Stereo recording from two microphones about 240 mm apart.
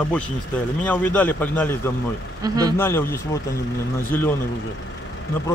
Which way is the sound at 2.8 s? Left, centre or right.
Centre.